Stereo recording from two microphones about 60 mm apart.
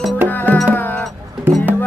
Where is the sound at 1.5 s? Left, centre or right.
Right.